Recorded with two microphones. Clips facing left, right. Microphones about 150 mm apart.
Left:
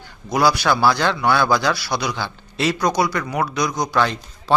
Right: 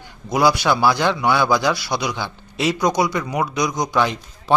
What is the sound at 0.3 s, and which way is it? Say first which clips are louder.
A man's voice: right 1 dB; 20° right (ahead or behind).